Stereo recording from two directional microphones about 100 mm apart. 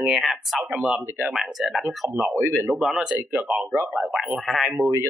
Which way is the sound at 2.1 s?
25° right (ahead or behind).